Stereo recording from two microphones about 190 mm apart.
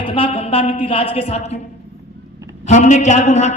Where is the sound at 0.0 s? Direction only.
30° left (ahead or behind).